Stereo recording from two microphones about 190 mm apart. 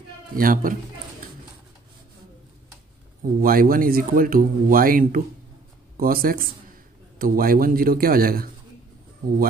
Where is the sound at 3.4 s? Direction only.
50° right (ahead or behind).